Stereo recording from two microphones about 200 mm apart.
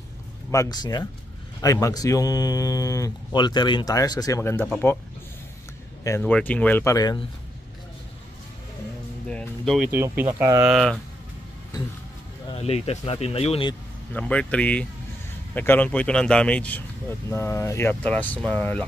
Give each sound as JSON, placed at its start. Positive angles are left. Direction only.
{"t": 0.5, "sound": "speech", "side_deg": 15}
{"t": 6.0, "sound": "speech", "side_deg": 10}
{"t": 9.3, "sound": "music", "side_deg": 5}
{"t": 9.8, "sound": "speech", "side_deg": -10}
{"t": 10.6, "sound": "speech", "side_deg": 0}
{"t": 12.4, "sound": "speech", "side_deg": 30}
{"t": 14.1, "sound": "speech", "side_deg": 5}